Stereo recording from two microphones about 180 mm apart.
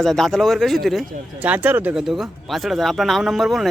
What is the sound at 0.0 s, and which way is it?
Speech, centre (ahead or behind).